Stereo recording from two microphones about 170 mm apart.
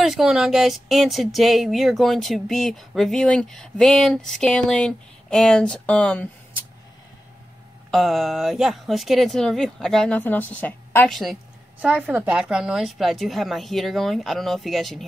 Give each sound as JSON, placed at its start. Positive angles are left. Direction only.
{"t": 0.0, "sound": "speech", "side_deg": 0}
{"t": 7.9, "sound": "speech", "side_deg": 0}
{"t": 11.1, "sound": "speech", "side_deg": 0}